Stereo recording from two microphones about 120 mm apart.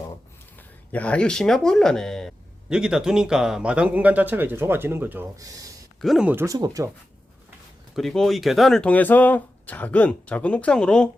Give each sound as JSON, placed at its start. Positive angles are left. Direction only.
{"t": 0.9, "sound": "speech", "side_deg": 10}
{"t": 2.6, "sound": "speech", "side_deg": -5}
{"t": 6.0, "sound": "speech", "side_deg": 0}
{"t": 6.4, "sound": "speech", "side_deg": -30}
{"t": 7.9, "sound": "speech", "side_deg": 0}